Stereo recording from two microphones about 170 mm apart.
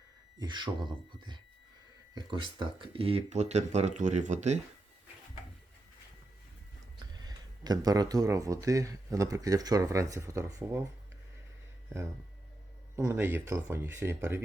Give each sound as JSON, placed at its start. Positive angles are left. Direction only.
{"t": 0.3, "sound": "speech", "side_deg": -25}
{"t": 7.0, "sound": "speech", "side_deg": -25}
{"t": 13.0, "sound": "speech", "side_deg": -15}